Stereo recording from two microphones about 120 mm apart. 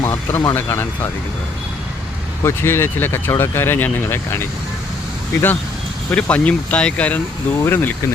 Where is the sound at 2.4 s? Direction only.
20° left (ahead or behind).